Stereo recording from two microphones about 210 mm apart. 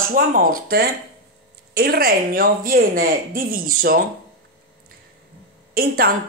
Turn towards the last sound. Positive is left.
turn(degrees=-45)  # may be behind; listen again after turning